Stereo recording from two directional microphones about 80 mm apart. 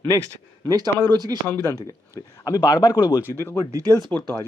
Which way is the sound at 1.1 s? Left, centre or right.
Right.